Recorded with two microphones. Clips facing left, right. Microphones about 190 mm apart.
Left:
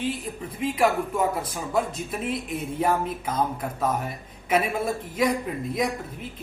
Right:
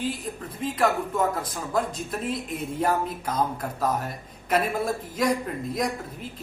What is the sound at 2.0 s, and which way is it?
Speech, 5° left (ahead or behind).